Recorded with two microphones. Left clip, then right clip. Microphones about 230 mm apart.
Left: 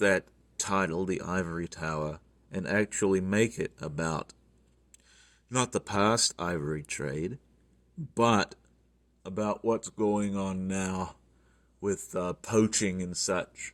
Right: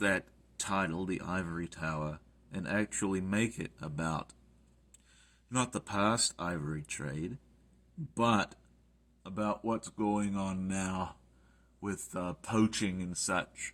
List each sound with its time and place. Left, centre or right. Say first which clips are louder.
0.0 s speech: left 6 dB; left